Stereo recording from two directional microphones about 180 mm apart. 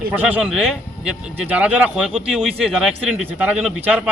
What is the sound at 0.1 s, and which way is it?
Speech, 10° right (ahead or behind).